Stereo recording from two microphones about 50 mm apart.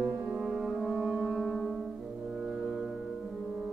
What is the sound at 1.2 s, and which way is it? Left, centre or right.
Music, centre.